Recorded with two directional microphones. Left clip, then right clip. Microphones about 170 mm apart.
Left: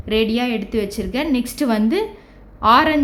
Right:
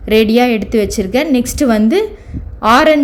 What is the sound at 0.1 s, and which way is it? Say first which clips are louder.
A woman's voice: right 9 dB; 30° right (ahead or behind).